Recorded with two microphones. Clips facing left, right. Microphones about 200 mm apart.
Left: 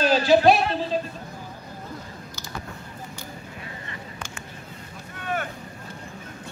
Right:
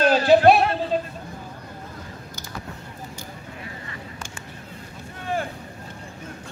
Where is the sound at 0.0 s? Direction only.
55° right (ahead or behind).